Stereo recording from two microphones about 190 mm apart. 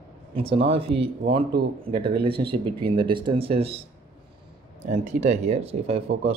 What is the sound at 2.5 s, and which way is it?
Speech, 25° right (ahead or behind).